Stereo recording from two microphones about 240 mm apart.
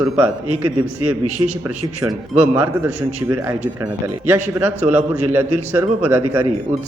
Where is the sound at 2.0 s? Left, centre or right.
Centre.